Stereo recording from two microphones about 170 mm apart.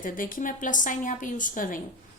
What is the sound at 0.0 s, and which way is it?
A woman's voice, 55° left (ahead or behind).